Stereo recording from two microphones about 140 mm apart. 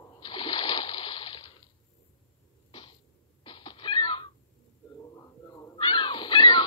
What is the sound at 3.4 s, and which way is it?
Cat, 35° left (ahead or behind).